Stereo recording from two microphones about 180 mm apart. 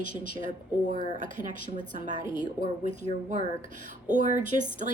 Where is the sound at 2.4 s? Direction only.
45° right (ahead or behind).